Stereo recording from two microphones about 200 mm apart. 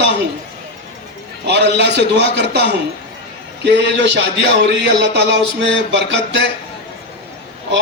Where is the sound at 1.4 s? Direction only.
55° right (ahead or behind).